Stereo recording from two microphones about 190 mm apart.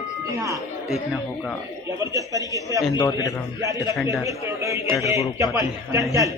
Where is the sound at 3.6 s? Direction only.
15° right (ahead or behind).